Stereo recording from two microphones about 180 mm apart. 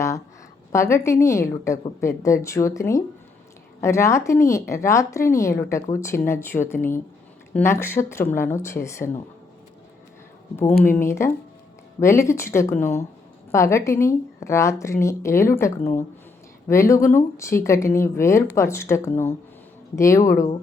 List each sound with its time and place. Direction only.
0.7 s speech: 15° left (ahead or behind)
10.6 s speech: 10° left (ahead or behind)